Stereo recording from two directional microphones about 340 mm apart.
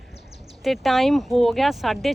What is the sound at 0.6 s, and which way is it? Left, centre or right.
A woman's voice, centre.